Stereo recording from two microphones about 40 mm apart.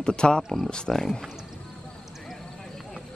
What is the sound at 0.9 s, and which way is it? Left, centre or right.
Speech, centre.